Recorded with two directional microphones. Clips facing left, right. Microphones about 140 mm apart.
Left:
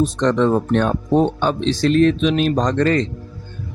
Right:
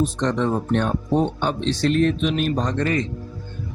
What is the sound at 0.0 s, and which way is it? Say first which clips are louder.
Speech: left 5 dB; 90° left.